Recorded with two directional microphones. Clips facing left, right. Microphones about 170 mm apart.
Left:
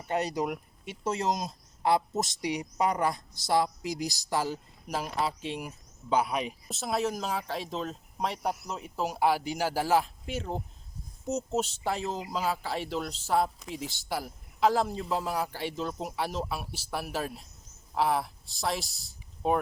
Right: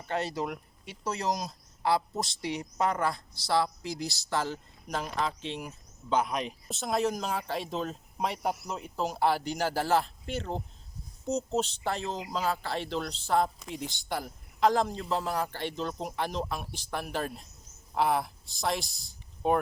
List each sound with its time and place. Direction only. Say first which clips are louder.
0.0 s speech: left 2 dB; 15° left (ahead or behind)